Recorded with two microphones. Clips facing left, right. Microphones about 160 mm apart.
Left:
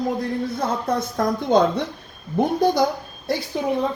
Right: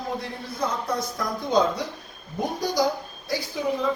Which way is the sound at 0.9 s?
55° left (ahead or behind).